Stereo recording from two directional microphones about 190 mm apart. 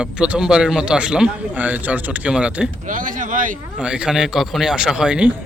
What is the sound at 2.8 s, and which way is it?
Speech, 45° right (ahead or behind).